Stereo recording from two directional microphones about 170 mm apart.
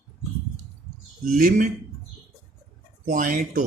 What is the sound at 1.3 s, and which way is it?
Speech, 50° right (ahead or behind).